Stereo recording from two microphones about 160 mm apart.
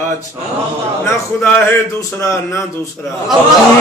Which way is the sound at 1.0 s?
15° left (ahead or behind).